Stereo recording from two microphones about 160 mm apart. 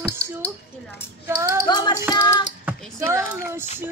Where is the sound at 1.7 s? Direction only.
25° left (ahead or behind).